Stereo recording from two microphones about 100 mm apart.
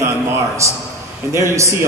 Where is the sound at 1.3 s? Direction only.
30° right (ahead or behind).